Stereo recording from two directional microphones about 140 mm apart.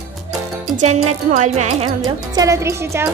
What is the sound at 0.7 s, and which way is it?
Speech, 55° right (ahead or behind).